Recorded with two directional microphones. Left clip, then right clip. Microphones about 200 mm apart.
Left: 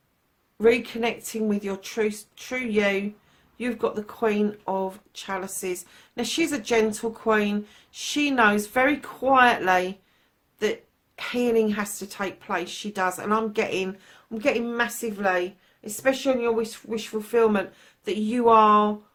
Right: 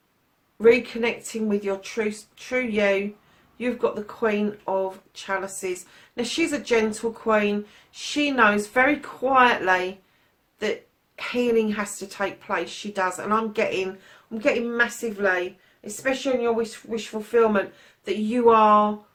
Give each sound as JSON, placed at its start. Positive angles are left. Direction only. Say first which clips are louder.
{"t": 0.6, "sound": "a woman's voice", "louder": "right 3 dB", "side_deg": 45}
{"t": 11.2, "sound": "a woman's voice", "louder": "right 1 dB", "side_deg": 45}